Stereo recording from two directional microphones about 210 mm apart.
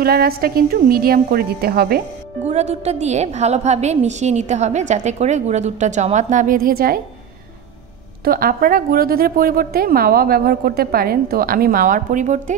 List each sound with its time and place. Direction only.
0.0 s a woman's voice: 45° right (ahead or behind)
2.4 s a woman's voice: 30° right (ahead or behind)
8.2 s a woman's voice: 45° right (ahead or behind)